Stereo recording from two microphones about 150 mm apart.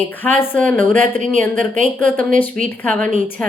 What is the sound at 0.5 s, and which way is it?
Speech, 10° left (ahead or behind).